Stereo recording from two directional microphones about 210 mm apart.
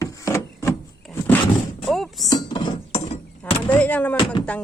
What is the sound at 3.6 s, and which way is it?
Speech, 5° left (ahead or behind).